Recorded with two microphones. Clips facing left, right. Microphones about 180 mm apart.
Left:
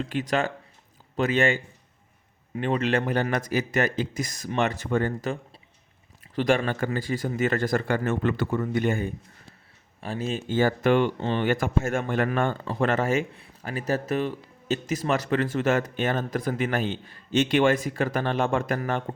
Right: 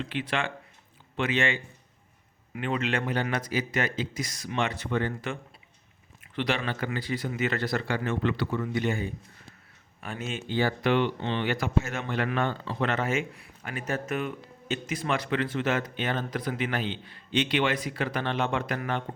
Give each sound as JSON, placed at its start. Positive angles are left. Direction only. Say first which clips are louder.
{"t": 0.0, "sound": "speech", "louder": "left 5 dB", "side_deg": 40}
{"t": 10.0, "sound": "speech", "louder": "left 5 dB", "side_deg": 35}
{"t": 13.3, "sound": "speech", "louder": "left 4 dB", "side_deg": 30}